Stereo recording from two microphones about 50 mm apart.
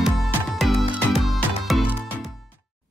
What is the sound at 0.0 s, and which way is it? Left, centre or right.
Music, centre.